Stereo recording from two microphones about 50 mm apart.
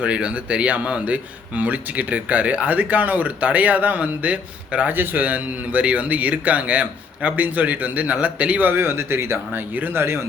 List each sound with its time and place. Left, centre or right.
0.0 s a man's voice: right
4.9 s a man's voice: right
8.7 s speech: right